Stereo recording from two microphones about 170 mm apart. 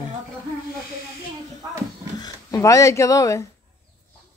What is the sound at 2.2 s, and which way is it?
Speech, 20° left (ahead or behind).